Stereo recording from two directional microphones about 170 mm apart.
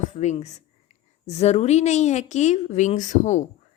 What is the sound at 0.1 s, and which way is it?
A woman's voice, 45° left (ahead or behind).